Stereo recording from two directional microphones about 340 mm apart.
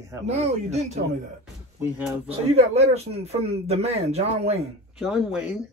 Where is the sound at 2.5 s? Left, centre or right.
Centre.